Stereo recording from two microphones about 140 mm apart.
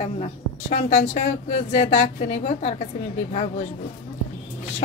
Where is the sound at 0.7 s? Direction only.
65° left (ahead or behind).